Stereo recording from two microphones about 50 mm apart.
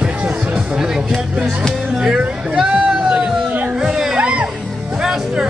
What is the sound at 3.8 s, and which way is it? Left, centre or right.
Music, centre.